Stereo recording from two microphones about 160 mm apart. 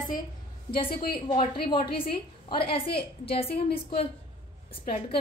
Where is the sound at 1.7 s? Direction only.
30° left (ahead or behind).